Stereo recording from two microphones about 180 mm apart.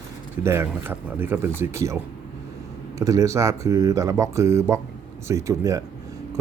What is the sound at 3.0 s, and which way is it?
Speech, 15° right (ahead or behind).